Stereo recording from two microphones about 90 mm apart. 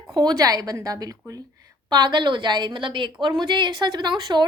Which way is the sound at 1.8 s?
50° right (ahead or behind).